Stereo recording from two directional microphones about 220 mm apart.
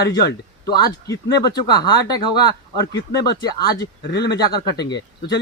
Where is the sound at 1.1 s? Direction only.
15° left (ahead or behind).